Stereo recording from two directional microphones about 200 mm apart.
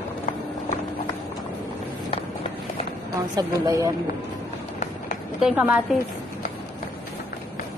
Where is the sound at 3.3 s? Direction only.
15° right (ahead or behind).